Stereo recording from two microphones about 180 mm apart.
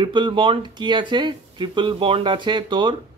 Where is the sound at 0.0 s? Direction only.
25° right (ahead or behind).